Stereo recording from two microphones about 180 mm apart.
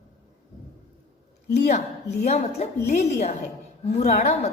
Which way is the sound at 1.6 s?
40° left (ahead or behind).